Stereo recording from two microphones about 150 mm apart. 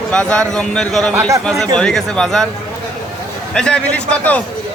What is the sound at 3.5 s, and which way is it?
Speech, 5° left (ahead or behind).